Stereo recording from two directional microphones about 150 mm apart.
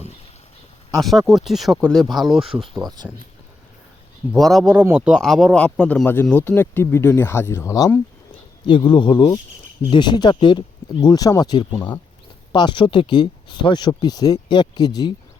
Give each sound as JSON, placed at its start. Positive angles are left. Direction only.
{"t": 0.9, "sound": "speech", "side_deg": 0}
{"t": 4.3, "sound": "speech", "side_deg": 0}
{"t": 8.6, "sound": "speech", "side_deg": 30}